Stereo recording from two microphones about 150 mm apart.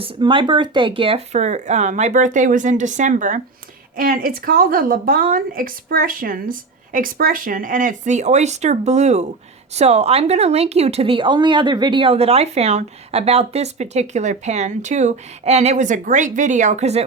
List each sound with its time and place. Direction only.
0.0 s a woman's voice: 35° right (ahead or behind); by 3.4 s 55° right (ahead or behind)
3.9 s a woman's voice: 70° right (ahead or behind); by 17.1 s 45° right (ahead or behind)